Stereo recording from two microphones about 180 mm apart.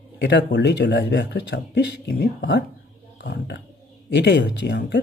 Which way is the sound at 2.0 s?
60° left (ahead or behind).